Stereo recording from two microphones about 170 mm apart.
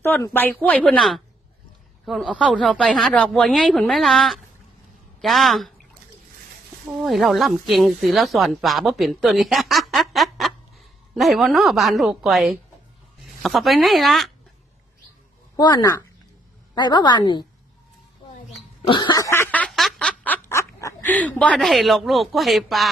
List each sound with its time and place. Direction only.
0.0 s speech: 15° left (ahead or behind)
6.9 s speech: centre (ahead or behind)
15.5 s a woman's voice: 25° left (ahead or behind)
18.9 s a sound: 25° left (ahead or behind); by 22.8 s centre (ahead or behind)